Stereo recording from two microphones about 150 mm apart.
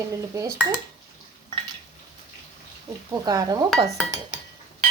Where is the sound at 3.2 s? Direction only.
25° right (ahead or behind).